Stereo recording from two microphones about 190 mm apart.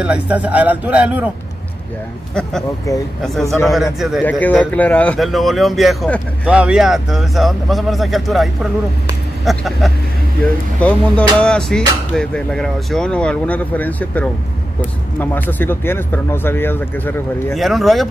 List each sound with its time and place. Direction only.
0.0 s speech: 5° right (ahead or behind)
2.9 s speech: 15° left (ahead or behind)
3.7 s speech: centre (ahead or behind)